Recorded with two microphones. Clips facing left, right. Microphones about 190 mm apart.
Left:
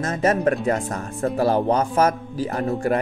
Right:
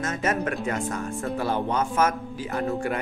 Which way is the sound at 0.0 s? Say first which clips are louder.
Left 6 dB; 35° left (ahead or behind).